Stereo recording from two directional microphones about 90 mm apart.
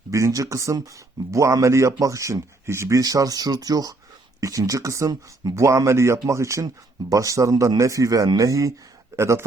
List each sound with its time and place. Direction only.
0.1 s speech: 35° right (ahead or behind)
3.0 s speech: 40° right (ahead or behind)